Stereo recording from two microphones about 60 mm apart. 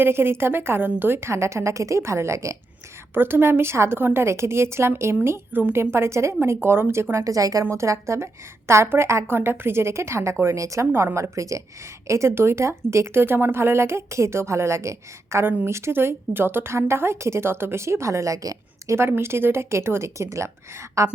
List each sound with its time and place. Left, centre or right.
0.0 s a woman's voice: right
3.2 s a woman's voice: right
7.3 s a woman's voice: right
7.6 s a woman's voice: right
10.6 s a woman's voice: right
10.9 s a woman's voice: right
12.3 s a woman's voice: right
18.9 s a woman's voice: right